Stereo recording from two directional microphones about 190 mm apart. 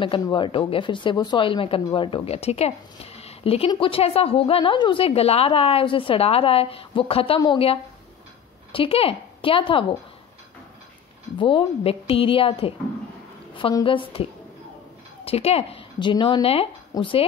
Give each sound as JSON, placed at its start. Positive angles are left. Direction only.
{"t": 0.0, "sound": "speech", "side_deg": 25}
{"t": 11.3, "sound": "speech", "side_deg": 25}